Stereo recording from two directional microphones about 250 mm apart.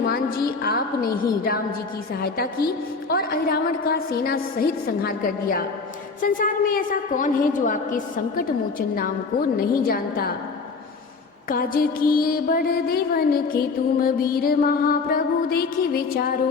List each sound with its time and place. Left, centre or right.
0.0 s a sound: left
2.2 s a woman's voice: left
9.6 s a woman's voice: left
11.4 s a woman's voice: left